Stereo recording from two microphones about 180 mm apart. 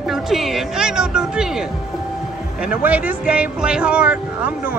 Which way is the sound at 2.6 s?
10° right (ahead or behind).